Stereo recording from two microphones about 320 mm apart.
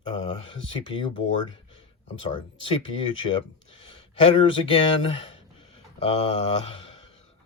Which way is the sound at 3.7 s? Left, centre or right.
Centre.